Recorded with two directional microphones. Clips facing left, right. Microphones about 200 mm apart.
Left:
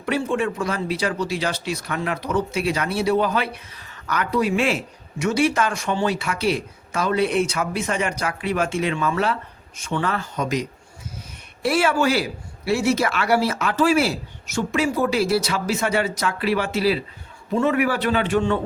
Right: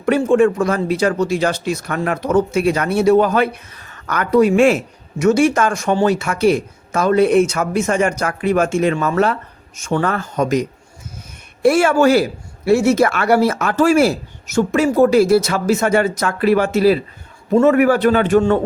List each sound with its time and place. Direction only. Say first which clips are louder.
0.0 s speech: right 9 dB; 45° right (ahead or behind)